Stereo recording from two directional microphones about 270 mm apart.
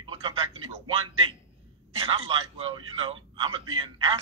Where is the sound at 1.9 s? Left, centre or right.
Centre.